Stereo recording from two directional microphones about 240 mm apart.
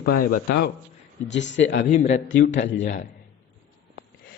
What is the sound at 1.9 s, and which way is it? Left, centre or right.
Speech, left.